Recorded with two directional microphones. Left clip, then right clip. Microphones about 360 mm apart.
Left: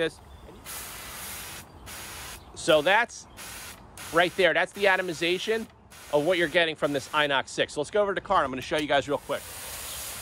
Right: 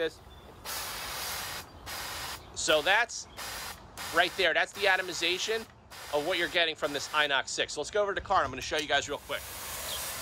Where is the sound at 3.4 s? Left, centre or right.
Centre.